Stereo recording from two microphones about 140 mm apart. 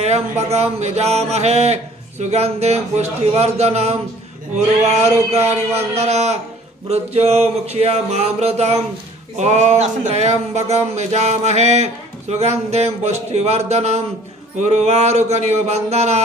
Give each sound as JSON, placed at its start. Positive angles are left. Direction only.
{"t": 0.0, "sound": "speech", "side_deg": -50}